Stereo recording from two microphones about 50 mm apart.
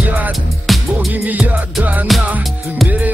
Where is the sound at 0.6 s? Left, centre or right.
Centre.